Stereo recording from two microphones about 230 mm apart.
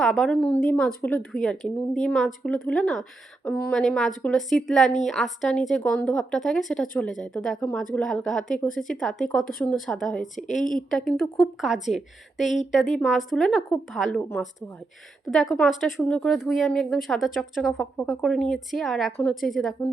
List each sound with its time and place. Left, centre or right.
0.0 s speech: centre
8.5 s speech: left
9.0 s speech: centre
10.6 s speech: left
10.9 s a woman's voice: centre